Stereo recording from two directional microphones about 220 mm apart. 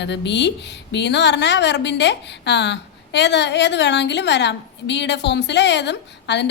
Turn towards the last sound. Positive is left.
turn(degrees=50)  # may be behind; listen again after turning